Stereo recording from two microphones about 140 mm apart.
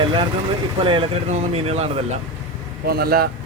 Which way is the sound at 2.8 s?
90° right.